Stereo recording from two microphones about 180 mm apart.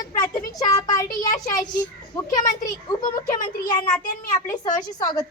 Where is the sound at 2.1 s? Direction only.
20° left (ahead or behind).